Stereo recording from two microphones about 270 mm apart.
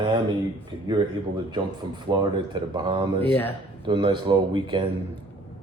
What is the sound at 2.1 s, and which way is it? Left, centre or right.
Speech, centre.